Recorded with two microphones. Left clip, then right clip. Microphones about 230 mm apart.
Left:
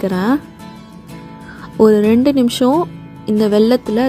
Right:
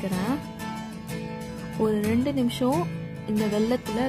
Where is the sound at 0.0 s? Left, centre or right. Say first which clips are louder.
Left 12 dB; centre.